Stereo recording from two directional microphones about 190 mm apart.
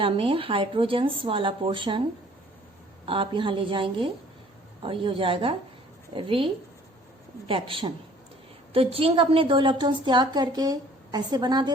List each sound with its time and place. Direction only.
0.0 s a woman's voice: 30° right (ahead or behind)
3.1 s a woman's voice: 25° right (ahead or behind)